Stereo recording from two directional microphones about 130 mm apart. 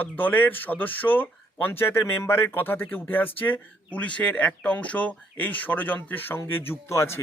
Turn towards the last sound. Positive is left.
turn(degrees=20)  # may be behind; listen again after turning